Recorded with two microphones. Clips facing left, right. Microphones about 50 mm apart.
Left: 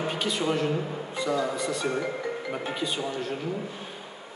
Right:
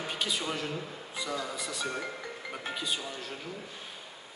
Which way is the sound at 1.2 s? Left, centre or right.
Centre.